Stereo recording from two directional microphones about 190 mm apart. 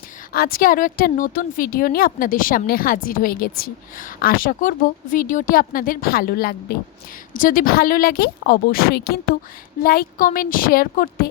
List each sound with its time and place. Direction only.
0.3 s a woman's voice: 50° left (ahead or behind)